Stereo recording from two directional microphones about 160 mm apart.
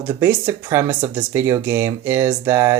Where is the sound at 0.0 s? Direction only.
15° right (ahead or behind).